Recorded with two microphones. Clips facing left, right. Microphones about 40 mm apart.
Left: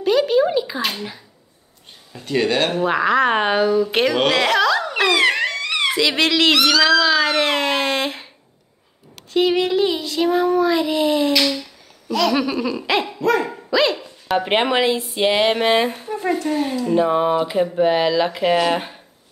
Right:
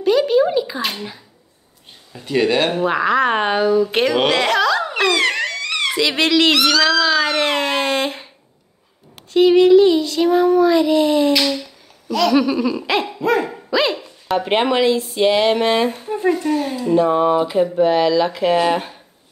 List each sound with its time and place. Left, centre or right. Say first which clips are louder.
0.0 s speech: right 1 dB; centre
2.1 s child singing: right 2 dB; centre
4.9 s a sound: even; centre
5.9 s child singing: right 3 dB; centre
9.3 s child singing: right 7 dB; centre
16.4 s speech: right 1 dB; centre